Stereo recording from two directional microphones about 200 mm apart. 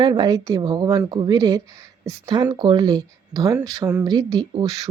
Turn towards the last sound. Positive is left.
turn(degrees=-20)  # may be behind; listen again after turning